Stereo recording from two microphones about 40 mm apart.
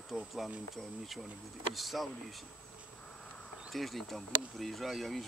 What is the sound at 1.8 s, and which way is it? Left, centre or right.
Speech, centre.